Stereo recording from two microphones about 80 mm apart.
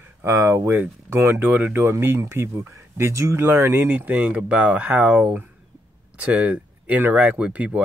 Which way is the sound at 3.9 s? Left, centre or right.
Centre.